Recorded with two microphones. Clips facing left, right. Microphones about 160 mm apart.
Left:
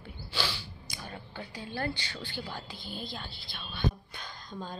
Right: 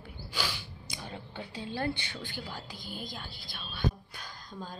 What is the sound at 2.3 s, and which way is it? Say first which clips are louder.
A woman's voice: left 2 dB; 10° right (ahead or behind).